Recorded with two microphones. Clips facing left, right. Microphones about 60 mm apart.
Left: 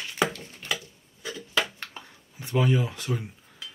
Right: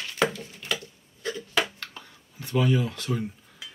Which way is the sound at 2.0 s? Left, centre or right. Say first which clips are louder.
Even; left.